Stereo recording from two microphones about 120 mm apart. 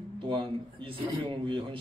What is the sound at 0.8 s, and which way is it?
A man's voice, 45° right (ahead or behind).